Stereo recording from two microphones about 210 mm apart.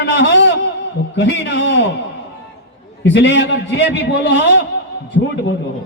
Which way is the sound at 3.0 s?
60° left (ahead or behind).